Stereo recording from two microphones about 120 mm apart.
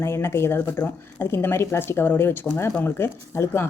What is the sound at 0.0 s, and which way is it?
Speech, 20° left (ahead or behind).